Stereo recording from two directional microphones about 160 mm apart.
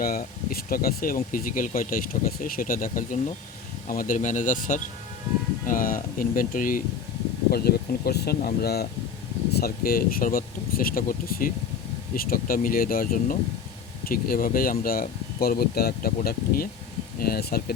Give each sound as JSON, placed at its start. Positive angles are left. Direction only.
{"t": 0.0, "sound": "speech", "side_deg": 65}
{"t": 7.5, "sound": "speech", "side_deg": 75}
{"t": 17.2, "sound": "speech", "side_deg": 75}